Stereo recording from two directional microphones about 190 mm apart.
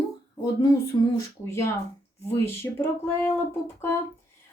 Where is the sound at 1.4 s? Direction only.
15° left (ahead or behind).